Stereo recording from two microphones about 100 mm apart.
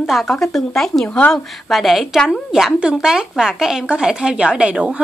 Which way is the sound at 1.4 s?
Centre (ahead or behind).